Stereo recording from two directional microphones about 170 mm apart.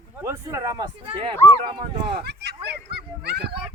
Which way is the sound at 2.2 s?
75° right (ahead or behind).